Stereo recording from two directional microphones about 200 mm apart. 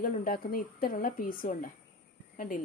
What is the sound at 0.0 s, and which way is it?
A woman's voice, 45° left (ahead or behind).